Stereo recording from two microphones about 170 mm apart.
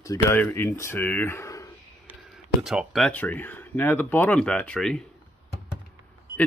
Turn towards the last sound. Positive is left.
turn(degrees=5)  # may be behind; listen again after turning